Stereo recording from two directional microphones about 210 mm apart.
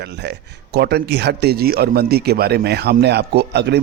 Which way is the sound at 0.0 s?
50° right (ahead or behind).